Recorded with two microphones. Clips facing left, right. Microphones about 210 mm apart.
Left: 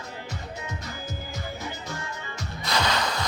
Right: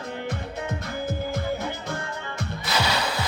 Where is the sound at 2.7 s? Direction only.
10° right (ahead or behind).